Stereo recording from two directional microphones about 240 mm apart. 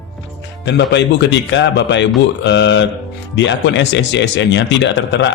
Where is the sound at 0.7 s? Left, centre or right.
Left.